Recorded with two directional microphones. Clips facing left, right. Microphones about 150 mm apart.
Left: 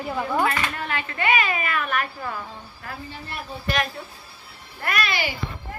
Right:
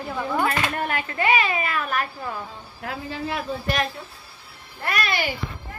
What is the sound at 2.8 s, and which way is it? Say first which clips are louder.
Speech: right 7 dB; 90° right.